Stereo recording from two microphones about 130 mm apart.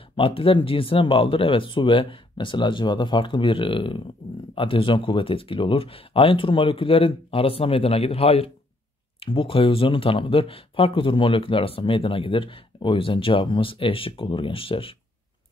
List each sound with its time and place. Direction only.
0.1 s speech: 45° left (ahead or behind)